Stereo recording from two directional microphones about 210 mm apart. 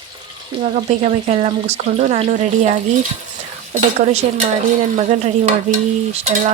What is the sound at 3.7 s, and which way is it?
Speech, 30° right (ahead or behind).